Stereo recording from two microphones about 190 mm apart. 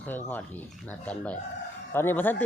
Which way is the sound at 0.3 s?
10° left (ahead or behind).